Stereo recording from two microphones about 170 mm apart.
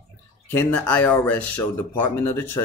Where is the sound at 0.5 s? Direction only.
10° left (ahead or behind).